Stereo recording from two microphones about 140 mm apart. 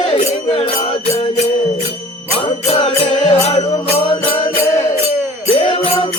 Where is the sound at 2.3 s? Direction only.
40° left (ahead or behind).